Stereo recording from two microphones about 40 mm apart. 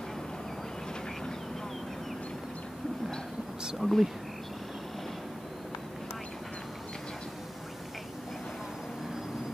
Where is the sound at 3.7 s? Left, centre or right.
Centre.